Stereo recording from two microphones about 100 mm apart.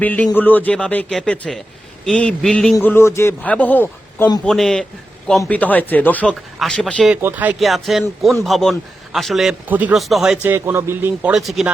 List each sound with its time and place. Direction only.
0.0 s speech: 15° left (ahead or behind)
1.5 s speech: centre (ahead or behind)
2.8 s speech: 25° left (ahead or behind)
3.4 s speech: 15° left (ahead or behind)
4.4 s speech: 5° left (ahead or behind)
5.5 s speech: 15° left (ahead or behind)
7.2 s a man's voice: 20° right (ahead or behind)
7.6 s speech: centre (ahead or behind)
9.6 s speech: 15° right (ahead or behind)
9.9 s speech: centre (ahead or behind)
10.4 s a man's voice: 25° right (ahead or behind)
11.2 s speech: 5° right (ahead or behind)